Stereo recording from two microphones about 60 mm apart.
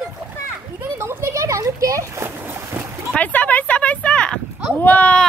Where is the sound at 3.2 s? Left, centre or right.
Left.